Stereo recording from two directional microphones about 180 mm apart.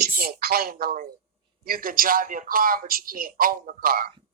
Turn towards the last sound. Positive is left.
turn(degrees=-55)  # may be behind; listen again after turning